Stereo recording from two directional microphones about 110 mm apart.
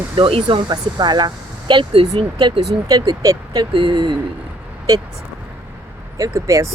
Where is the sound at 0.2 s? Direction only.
55° right (ahead or behind).